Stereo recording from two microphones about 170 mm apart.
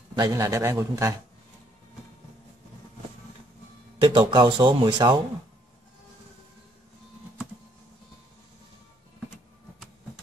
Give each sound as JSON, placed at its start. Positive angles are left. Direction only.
{"t": 0.1, "sound": "a man's voice", "side_deg": -20}
{"t": 4.0, "sound": "speech", "side_deg": -30}